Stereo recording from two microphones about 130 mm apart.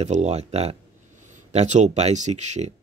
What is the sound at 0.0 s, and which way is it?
Speech, 60° right (ahead or behind).